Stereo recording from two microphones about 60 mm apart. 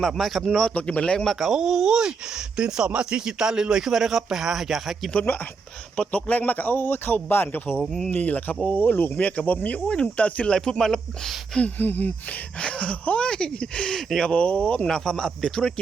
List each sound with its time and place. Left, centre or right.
0.0 s speech: centre
0.7 s speech: left
1.2 s speech: centre
6.1 s a man's voice: left
7.8 s speech: centre
8.1 s a man's voice: left
9.1 s speech: left
11.6 s a man's voice: left
12.5 s speech: centre
14.8 s speech: centre